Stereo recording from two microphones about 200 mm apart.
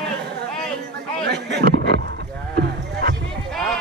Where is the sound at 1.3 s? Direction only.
55° right (ahead or behind).